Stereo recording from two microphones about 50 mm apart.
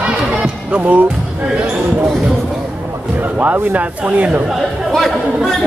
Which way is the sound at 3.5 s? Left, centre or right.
Right.